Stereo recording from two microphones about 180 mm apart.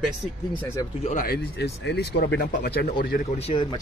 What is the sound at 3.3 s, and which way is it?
Speech, 35° left (ahead or behind).